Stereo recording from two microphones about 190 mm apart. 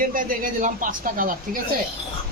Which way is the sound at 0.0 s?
45° right (ahead or behind).